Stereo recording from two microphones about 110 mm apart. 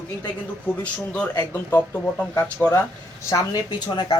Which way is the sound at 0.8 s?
10° left (ahead or behind).